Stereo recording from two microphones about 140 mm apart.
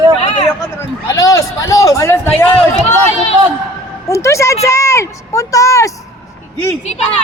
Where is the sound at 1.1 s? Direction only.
25° left (ahead or behind).